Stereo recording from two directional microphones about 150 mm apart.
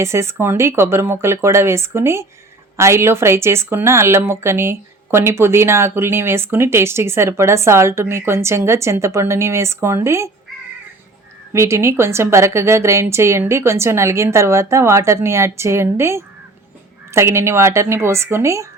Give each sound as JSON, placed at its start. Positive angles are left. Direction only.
{"t": 0.0, "sound": "speech", "side_deg": -20}
{"t": 11.5, "sound": "a woman's voice", "side_deg": -20}